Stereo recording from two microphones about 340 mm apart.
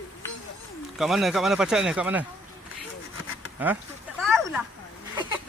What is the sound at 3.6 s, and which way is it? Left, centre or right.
Speech, centre.